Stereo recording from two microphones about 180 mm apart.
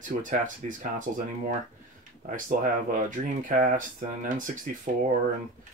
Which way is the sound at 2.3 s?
45° right (ahead or behind).